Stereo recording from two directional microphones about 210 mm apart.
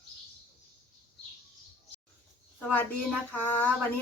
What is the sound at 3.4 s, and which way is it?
Speech, 10° left (ahead or behind).